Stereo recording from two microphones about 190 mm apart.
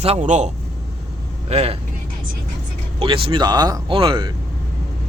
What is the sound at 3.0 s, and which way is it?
Speech, 25° right (ahead or behind).